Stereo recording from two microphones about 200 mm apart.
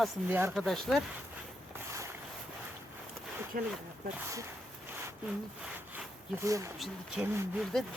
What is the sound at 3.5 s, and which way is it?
Speech, 45° right (ahead or behind).